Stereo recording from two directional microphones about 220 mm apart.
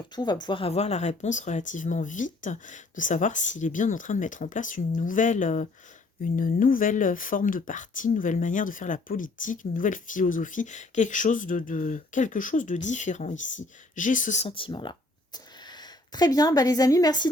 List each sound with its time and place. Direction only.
0.2 s speech: 20° left (ahead or behind)